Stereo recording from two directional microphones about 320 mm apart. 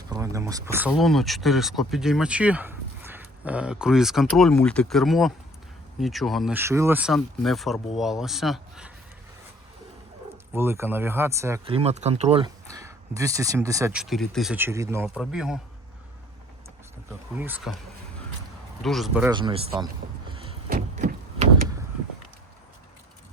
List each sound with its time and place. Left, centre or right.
0.1 s speech: centre
10.5 s speech: centre
17.1 s speech: centre
18.8 s speech: centre
19.3 s speech: centre
20.3 s a sound: centre